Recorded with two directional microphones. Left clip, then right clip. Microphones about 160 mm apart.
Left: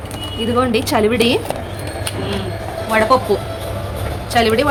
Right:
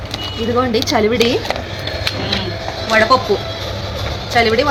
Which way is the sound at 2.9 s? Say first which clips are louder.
Right 2 dB; 5° left (ahead or behind).